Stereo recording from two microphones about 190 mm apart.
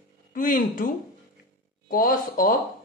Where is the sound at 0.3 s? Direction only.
45° left (ahead or behind).